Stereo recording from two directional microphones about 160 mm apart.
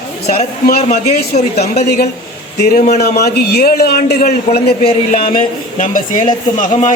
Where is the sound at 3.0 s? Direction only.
80° left.